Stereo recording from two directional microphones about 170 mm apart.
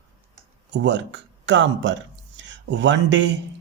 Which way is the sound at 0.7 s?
90° right.